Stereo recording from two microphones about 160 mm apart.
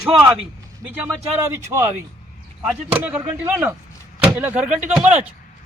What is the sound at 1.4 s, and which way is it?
Speech, 20° right (ahead or behind).